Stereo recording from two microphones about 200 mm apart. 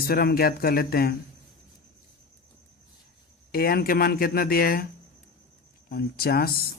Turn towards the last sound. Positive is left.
turn(degrees=50)  # may be behind; listen again after turning